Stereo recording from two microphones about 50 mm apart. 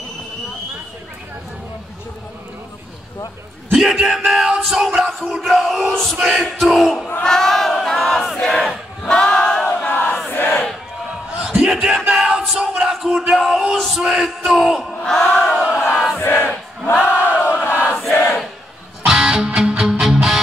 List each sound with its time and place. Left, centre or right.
3.7 s a sound: centre
7.2 s battle cry: centre
9.1 s choir: centre
9.9 s battle cry: left
10.3 s crowd: left
11.3 s a sound: centre
15.0 s crowd: centre
16.2 s crowd: left
16.9 s battle cry: left
17.5 s a sound: left
18.1 s crowd: left
19.0 s music: centre